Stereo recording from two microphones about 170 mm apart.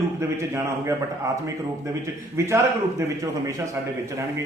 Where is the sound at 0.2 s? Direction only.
15° right (ahead or behind).